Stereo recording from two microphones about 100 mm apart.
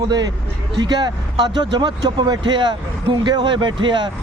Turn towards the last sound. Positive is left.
turn(degrees=-50)  # may be behind; listen again after turning